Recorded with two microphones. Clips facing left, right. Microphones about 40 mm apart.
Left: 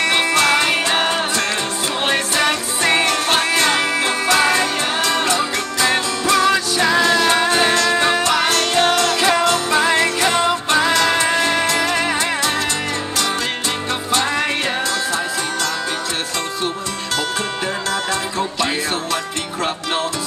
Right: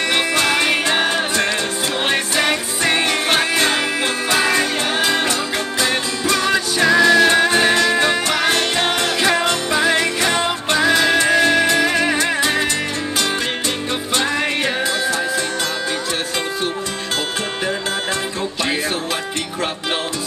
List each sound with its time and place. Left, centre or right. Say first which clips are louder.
0.3 s music: left 1 dB; centre
2.0 s music: left 1 dB; centre
3.1 s music: even; centre
5.8 s music: left 3 dB; centre; by 9.1 s right
10.9 s music: right 1 dB; centre